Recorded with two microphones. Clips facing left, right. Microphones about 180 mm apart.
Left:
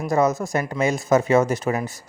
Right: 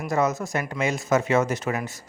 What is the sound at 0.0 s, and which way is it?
Speech, 35° left (ahead or behind).